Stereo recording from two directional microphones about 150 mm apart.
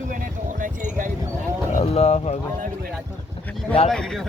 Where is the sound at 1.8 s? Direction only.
45° left (ahead or behind).